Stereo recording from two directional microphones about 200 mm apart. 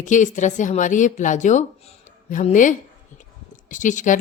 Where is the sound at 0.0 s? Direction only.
40° left (ahead or behind).